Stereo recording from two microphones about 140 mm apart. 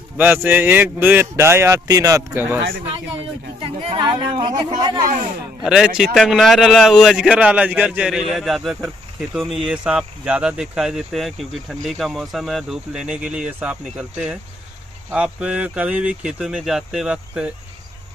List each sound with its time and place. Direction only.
0.2 s speech: 15° right (ahead or behind)
3.9 s speech: 35° right (ahead or behind)
5.6 s speech: 5° right (ahead or behind)